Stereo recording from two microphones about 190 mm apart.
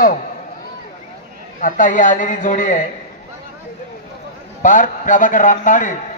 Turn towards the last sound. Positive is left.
turn(degrees=40)  # may be behind; listen again after turning